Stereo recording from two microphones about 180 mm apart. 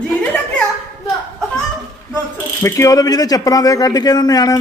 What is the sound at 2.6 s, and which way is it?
A man's voice, 15° left (ahead or behind).